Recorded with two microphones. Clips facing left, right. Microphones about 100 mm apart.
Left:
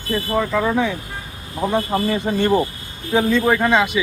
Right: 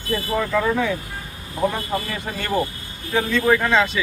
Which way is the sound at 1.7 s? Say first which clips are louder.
Left 7 dB; 25° left (ahead or behind).